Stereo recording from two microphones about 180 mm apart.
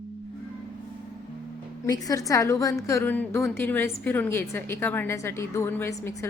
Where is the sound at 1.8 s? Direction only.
20° left (ahead or behind).